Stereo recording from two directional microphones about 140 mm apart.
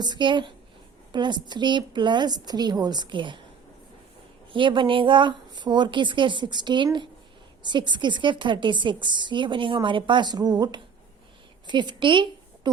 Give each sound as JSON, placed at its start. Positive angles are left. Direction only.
{"t": 0.0, "sound": "a woman's voice", "side_deg": -30}
{"t": 4.5, "sound": "a woman's voice", "side_deg": -35}